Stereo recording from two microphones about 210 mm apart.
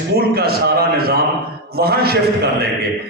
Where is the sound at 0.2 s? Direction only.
50° right (ahead or behind).